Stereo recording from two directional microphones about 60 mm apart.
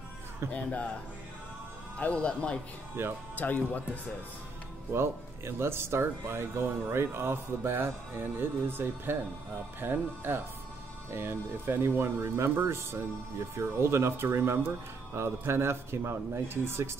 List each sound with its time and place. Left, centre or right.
0.5 s speech: left
2.0 s speech: centre
3.0 s speech: right
3.3 s speech: left
4.9 s speech: right